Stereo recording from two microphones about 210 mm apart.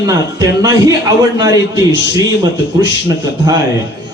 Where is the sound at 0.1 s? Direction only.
15° right (ahead or behind).